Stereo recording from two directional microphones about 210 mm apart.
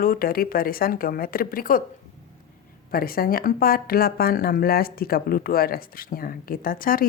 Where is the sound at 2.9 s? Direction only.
45° left (ahead or behind).